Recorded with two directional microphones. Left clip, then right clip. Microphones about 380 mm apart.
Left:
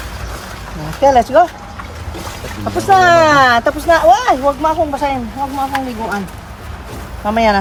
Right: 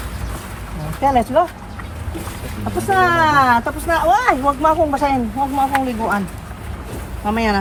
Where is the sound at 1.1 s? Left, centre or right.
Left.